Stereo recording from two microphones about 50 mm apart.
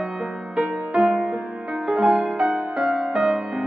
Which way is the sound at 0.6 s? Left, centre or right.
Centre.